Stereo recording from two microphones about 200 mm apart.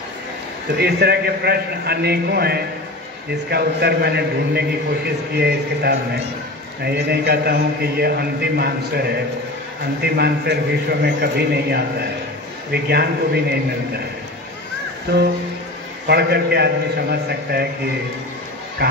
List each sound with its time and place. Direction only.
0.7 s a man's voice: 55° right (ahead or behind)
16.1 s a man's voice: 55° right (ahead or behind)
18.8 s a man's voice: 55° right (ahead or behind)